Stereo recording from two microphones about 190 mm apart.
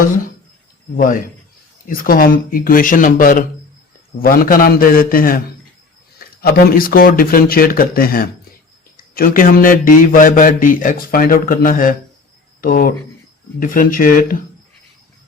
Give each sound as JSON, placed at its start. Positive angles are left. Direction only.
{"t": 0.9, "sound": "a man's voice", "side_deg": 45}